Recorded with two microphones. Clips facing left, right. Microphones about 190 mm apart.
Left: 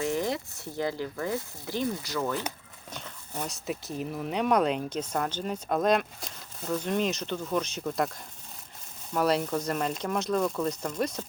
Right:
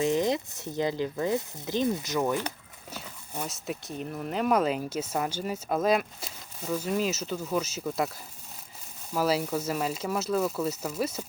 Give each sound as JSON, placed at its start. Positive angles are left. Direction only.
{"t": 0.0, "sound": "speech", "side_deg": -20}
{"t": 2.9, "sound": "speech", "side_deg": -5}
{"t": 9.1, "sound": "speech", "side_deg": -5}